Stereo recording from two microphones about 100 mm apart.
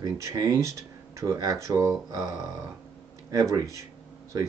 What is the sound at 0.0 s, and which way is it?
Speech, 40° right (ahead or behind).